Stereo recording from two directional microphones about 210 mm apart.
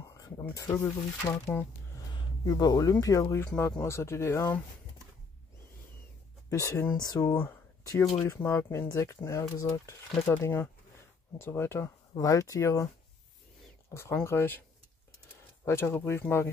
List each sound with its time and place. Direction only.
0.1 s a sound: 15° left (ahead or behind)
1.3 s speech: 10° left (ahead or behind)
6.5 s speech: 15° left (ahead or behind)
13.9 s speech: 15° left (ahead or behind)
15.6 s speech: 10° left (ahead or behind)